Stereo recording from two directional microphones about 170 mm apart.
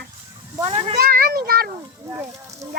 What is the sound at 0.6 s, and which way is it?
Speech, 35° right (ahead or behind).